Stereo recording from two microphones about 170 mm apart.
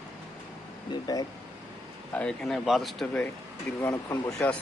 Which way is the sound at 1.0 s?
20° left (ahead or behind).